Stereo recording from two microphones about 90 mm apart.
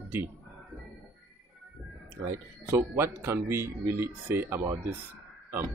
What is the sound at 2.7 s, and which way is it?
Speech, 30° right (ahead or behind).